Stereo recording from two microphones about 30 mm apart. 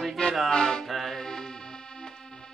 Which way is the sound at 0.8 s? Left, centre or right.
Centre.